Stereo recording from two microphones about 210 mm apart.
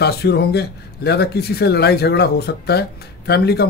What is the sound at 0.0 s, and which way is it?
Speech, 50° left (ahead or behind).